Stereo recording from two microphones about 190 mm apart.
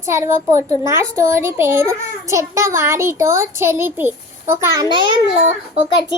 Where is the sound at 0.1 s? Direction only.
15° right (ahead or behind).